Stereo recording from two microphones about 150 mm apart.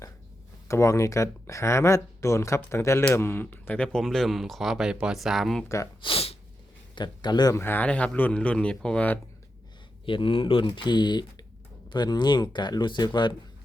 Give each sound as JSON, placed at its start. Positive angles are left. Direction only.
{"t": 0.7, "sound": "speech", "side_deg": 20}
{"t": 5.6, "sound": "speech", "side_deg": 20}
{"t": 6.0, "sound": "sneeze", "side_deg": 40}
{"t": 6.9, "sound": "speech", "side_deg": 30}
{"t": 7.6, "sound": "speech", "side_deg": 15}
{"t": 10.1, "sound": "speech", "side_deg": 35}